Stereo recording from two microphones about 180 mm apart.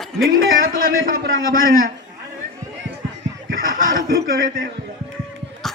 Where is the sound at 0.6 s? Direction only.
50° right (ahead or behind).